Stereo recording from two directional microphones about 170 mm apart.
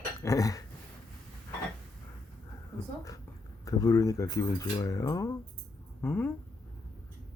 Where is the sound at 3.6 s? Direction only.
20° left (ahead or behind).